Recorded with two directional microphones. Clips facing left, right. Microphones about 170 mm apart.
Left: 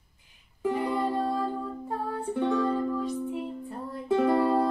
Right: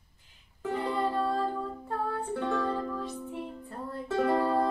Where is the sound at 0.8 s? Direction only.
10° left (ahead or behind).